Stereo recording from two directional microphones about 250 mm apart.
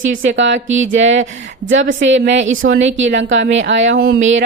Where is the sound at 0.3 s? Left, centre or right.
Right.